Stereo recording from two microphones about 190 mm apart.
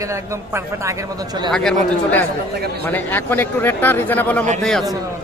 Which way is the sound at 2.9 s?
10° left (ahead or behind).